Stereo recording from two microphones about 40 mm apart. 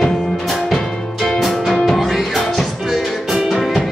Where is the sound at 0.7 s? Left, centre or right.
Centre.